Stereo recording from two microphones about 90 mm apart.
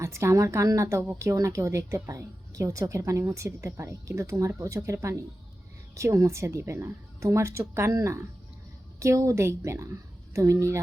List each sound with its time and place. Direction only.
0.0 s a woman's voice: 30° right (ahead or behind)